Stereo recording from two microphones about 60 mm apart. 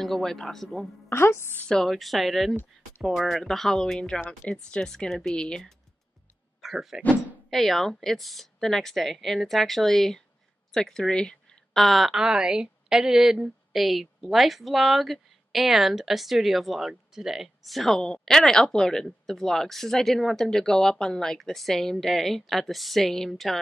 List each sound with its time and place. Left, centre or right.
0.0 s a woman's voice: centre
1.0 s a woman's voice: left
1.7 s a woman's voice: centre
6.6 s a woman's voice: centre
11.7 s a woman's voice: centre
12.2 s a woman's voice: centre